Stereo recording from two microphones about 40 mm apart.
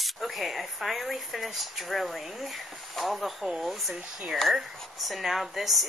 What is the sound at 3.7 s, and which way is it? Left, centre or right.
Speech, centre.